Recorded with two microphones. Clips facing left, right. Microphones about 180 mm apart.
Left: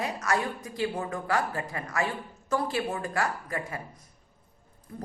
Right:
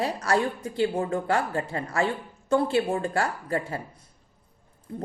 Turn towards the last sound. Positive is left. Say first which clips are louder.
# right 5 dB
turn(degrees=-25)  # may be behind; listen again after turning